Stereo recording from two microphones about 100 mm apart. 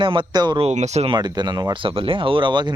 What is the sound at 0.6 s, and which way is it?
Speech, 90° right.